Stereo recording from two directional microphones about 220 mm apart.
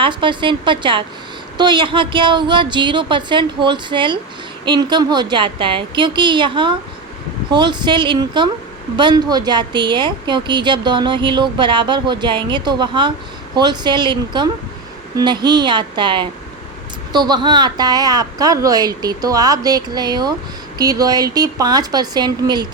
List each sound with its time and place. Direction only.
0.0 s a woman's voice: 20° right (ahead or behind)